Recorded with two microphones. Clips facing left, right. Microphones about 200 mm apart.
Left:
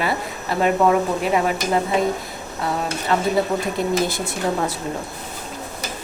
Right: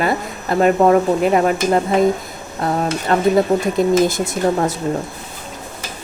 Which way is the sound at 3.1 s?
45° right (ahead or behind).